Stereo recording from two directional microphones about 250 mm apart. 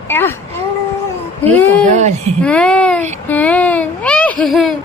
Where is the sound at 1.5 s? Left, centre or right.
Centre.